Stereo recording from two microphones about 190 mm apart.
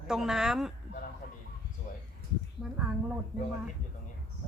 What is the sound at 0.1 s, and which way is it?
Hammer, 5° right (ahead or behind).